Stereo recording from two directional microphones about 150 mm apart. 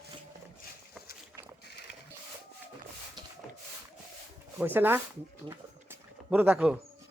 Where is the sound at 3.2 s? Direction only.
30° right (ahead or behind).